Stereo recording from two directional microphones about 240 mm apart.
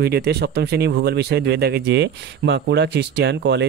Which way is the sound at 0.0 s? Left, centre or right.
Right.